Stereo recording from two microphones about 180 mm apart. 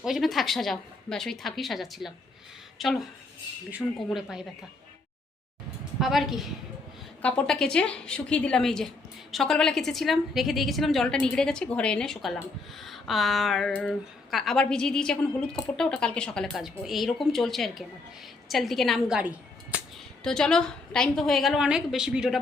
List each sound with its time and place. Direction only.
0.0 s a woman's voice: centre (ahead or behind)
6.0 s speech: centre (ahead or behind)